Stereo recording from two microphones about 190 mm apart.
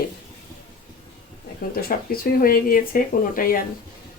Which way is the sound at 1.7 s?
50° left (ahead or behind).